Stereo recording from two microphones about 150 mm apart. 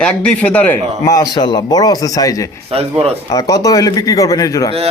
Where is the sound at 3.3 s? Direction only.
25° left (ahead or behind).